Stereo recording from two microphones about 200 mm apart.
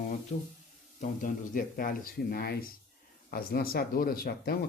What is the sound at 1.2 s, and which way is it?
Speech, 45° left (ahead or behind).